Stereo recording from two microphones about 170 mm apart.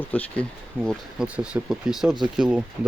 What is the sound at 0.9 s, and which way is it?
Speech, 5° right (ahead or behind).